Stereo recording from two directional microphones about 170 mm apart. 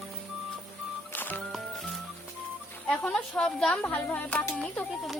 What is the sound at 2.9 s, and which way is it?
Speech, 5° left (ahead or behind).